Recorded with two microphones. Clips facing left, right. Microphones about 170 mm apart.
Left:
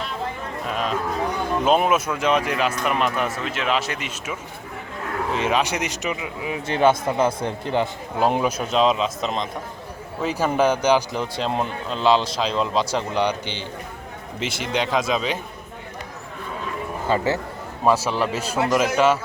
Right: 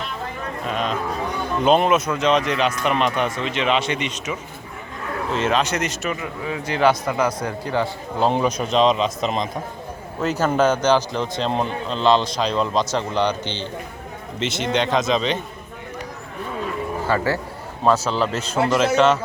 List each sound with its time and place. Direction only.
0.6 s cattle: 5° left (ahead or behind)
1.6 s speech: 5° left (ahead or behind); by 7.9 s 20° left (ahead or behind)
8.2 s speech: 10° left (ahead or behind)
10.3 s speech: 10° left (ahead or behind)
17.1 s speech: 20° left (ahead or behind)
17.8 s speech: 10° left (ahead or behind)